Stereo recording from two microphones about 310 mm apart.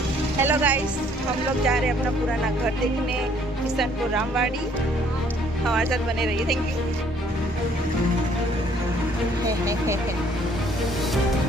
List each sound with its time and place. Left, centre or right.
0.4 s speech: centre
3.8 s speech: centre
5.6 s speech: centre
9.5 s speech: centre